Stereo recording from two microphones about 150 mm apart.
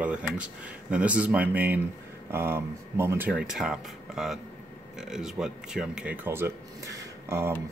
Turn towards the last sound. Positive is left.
turn(degrees=-15)  # may be behind; listen again after turning